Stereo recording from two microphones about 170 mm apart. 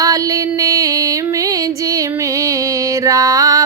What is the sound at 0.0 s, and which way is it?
Female singing, 20° right (ahead or behind).